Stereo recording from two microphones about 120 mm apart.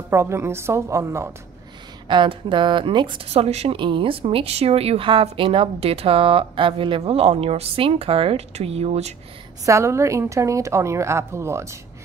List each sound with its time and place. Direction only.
0.1 s a woman's voice: 20° right (ahead or behind)
2.0 s a woman's voice: 40° right (ahead or behind)
3.3 s speech: 60° right (ahead or behind)
9.7 s a woman's voice: 25° right (ahead or behind)